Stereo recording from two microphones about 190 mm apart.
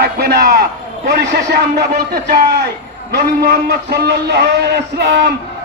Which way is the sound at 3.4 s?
55° right (ahead or behind).